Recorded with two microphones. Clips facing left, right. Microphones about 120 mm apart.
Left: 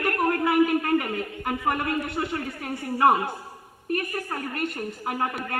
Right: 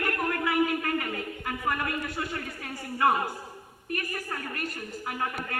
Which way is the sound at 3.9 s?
35° left (ahead or behind).